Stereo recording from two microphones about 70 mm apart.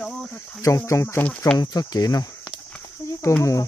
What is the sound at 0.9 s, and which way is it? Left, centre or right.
Speech, left.